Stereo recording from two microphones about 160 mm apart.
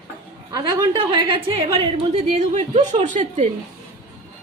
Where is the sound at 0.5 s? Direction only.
30° right (ahead or behind); by 3.5 s 50° right (ahead or behind).